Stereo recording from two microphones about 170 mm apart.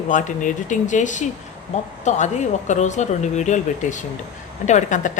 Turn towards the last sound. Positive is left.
turn(degrees=45)  # may be behind; listen again after turning